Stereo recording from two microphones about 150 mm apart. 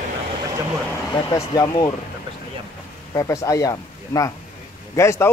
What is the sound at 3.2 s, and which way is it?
A man's voice, 20° left (ahead or behind).